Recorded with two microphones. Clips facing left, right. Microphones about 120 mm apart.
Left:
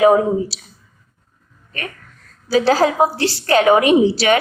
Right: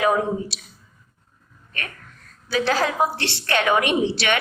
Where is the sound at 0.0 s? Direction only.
30° left (ahead or behind).